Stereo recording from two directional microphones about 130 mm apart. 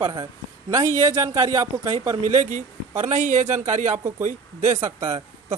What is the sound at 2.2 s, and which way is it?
A man's voice, 70° right (ahead or behind).